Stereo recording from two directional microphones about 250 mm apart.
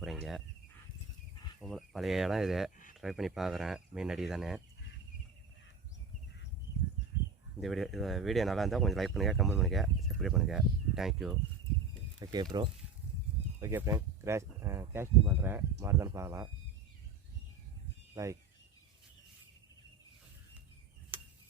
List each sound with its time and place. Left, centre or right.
0.0 s cricket: centre
1.6 s speech: centre
7.6 s speech: centre
12.2 s speech: centre
13.6 s speech: centre
18.1 s speech: centre
21.1 s a sound: centre